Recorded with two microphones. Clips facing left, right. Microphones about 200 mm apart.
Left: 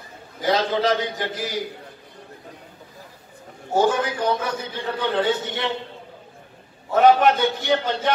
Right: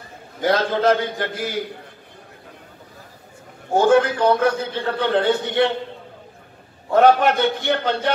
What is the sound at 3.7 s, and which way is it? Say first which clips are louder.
A man's voice: right 5 dB; 65° right (ahead or behind).